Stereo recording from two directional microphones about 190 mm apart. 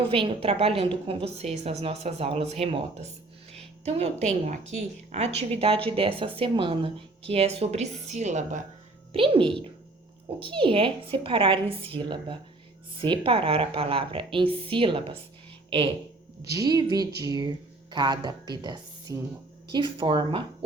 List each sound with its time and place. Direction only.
0.1 s a woman's voice: 30° right (ahead or behind)
9.1 s a woman's voice: 25° right (ahead or behind)
16.5 s a woman's voice: 20° right (ahead or behind)